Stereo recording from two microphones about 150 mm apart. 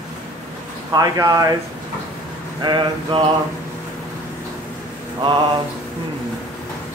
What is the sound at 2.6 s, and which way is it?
Speech, 35° right (ahead or behind).